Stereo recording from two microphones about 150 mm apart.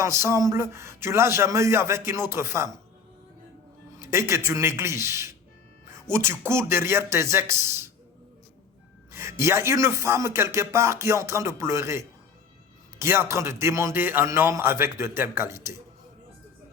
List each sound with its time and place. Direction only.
0.0 s a man's voice: 15° right (ahead or behind)
4.0 s a man's voice: 15° right (ahead or behind)
9.4 s a man's voice: 20° right (ahead or behind)